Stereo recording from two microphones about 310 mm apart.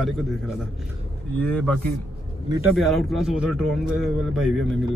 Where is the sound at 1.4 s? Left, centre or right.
Centre.